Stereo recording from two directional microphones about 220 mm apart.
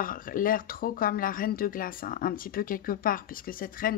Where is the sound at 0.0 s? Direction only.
40° left (ahead or behind).